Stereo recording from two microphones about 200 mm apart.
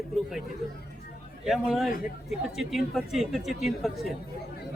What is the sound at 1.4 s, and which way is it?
A man's voice, centre (ahead or behind).